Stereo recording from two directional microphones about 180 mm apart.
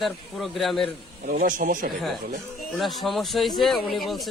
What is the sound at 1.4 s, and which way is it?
Speech, 50° right (ahead or behind).